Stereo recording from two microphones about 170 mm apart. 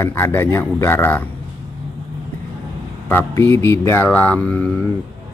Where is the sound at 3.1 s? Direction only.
15° left (ahead or behind).